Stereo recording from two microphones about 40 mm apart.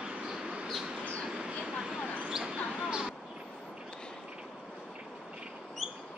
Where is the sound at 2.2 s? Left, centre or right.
Centre.